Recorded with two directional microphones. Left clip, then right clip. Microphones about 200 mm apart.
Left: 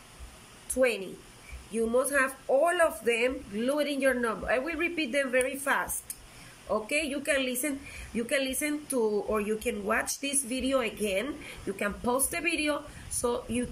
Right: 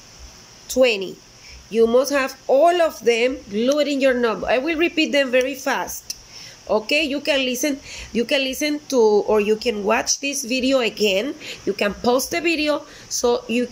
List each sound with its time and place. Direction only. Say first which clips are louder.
0.7 s speech: right 10 dB; centre (ahead or behind)
8.9 s speech: right 14 dB; 20° right (ahead or behind)
9.3 s speech: right 12 dB; 5° right (ahead or behind)